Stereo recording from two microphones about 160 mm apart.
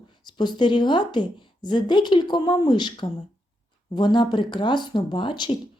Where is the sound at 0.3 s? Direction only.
30° left (ahead or behind).